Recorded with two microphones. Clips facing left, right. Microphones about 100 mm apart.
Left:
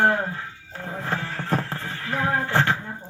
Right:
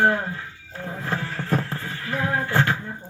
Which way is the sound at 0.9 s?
35° left (ahead or behind).